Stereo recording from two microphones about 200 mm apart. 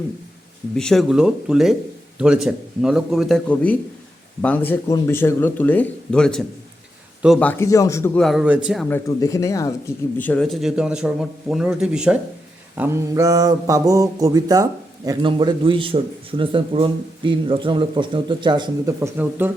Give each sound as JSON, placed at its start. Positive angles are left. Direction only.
{"t": 0.8, "sound": "a man's voice", "side_deg": 0}
{"t": 8.9, "sound": "a man's voice", "side_deg": 15}
{"t": 12.7, "sound": "mantra", "side_deg": -10}
{"t": 16.4, "sound": "a man's voice", "side_deg": -25}